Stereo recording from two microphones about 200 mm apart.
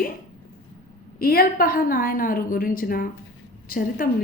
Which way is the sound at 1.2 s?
50° left (ahead or behind).